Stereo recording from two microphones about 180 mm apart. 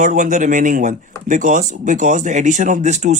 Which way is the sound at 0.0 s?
45° right (ahead or behind).